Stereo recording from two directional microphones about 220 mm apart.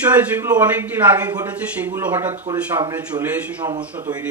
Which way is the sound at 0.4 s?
10° right (ahead or behind).